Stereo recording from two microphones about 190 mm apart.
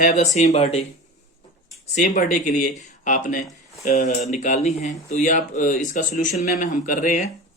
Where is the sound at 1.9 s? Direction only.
40° left (ahead or behind).